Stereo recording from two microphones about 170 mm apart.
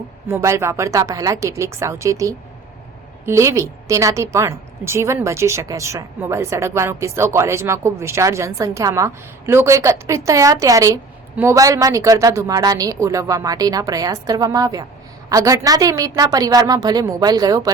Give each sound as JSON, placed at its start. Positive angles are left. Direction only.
{"t": 0.3, "sound": "a woman's voice", "side_deg": -15}